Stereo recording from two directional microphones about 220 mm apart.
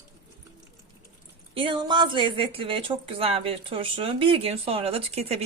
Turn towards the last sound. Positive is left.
turn(degrees=-30)  # may be behind; listen again after turning